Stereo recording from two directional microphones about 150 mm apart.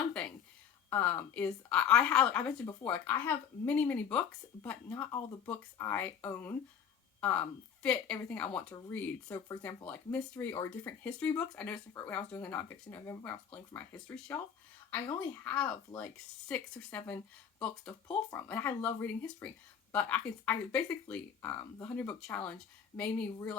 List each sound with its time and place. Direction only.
0.1 s a sound: 10° left (ahead or behind)
0.9 s speech: 15° left (ahead or behind)
15.4 s speech: 10° left (ahead or behind)